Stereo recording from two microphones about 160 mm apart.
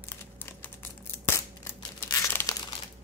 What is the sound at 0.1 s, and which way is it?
Crumpling, 15° left (ahead or behind).